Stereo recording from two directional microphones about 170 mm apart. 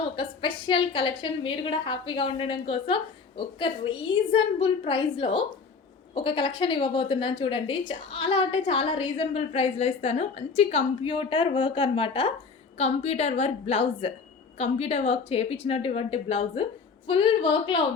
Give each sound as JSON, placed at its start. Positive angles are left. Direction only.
{"t": 0.2, "sound": "a woman's voice", "side_deg": 30}